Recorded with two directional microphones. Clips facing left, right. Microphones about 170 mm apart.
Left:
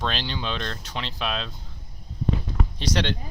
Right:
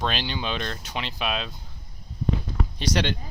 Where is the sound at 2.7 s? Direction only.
5° right (ahead or behind).